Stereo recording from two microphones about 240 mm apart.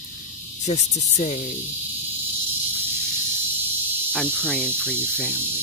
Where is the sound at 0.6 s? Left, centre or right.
Left.